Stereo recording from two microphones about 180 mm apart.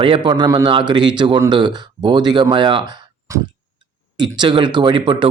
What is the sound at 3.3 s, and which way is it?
Tick-tock, 15° right (ahead or behind).